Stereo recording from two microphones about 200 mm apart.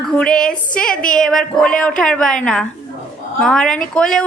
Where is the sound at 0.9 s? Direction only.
45° left (ahead or behind).